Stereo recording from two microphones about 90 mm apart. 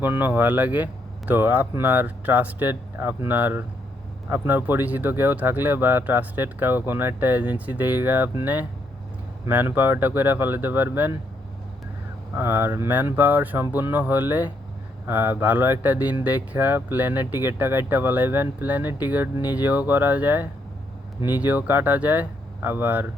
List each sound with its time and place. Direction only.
0.0 s speech: 20° right (ahead or behind)
12.3 s speech: 25° right (ahead or behind)